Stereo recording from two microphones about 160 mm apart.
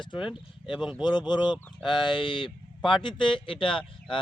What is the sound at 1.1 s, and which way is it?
Speech, 30° left (ahead or behind).